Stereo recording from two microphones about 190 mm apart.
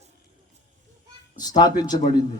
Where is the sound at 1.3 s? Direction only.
20° left (ahead or behind).